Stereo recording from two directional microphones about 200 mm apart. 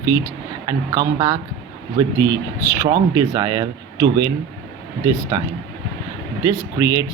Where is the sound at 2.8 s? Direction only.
15° right (ahead or behind).